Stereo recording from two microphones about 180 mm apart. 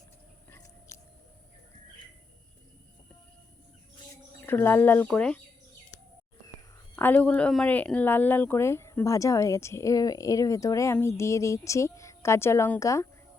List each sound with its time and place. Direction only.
4.4 s speech: 10° left (ahead or behind)
6.9 s speech: 10° left (ahead or behind)